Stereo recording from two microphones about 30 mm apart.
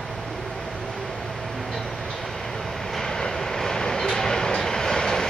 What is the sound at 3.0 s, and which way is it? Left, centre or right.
Vehicle, centre.